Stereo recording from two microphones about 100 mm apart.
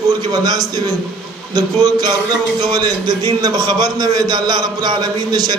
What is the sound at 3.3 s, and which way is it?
A man's voice, 45° right (ahead or behind).